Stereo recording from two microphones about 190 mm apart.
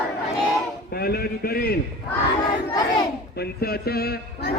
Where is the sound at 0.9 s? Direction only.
55° left (ahead or behind).